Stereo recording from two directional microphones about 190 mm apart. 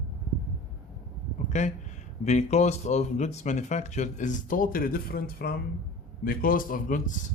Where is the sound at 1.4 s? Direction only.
40° left (ahead or behind).